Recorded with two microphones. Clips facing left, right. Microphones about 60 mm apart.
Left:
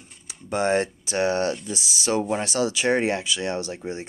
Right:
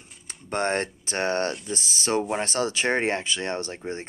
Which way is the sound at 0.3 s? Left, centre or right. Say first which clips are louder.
Left 3 dB; right.